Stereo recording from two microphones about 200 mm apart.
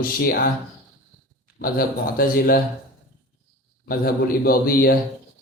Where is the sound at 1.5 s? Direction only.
50° left (ahead or behind).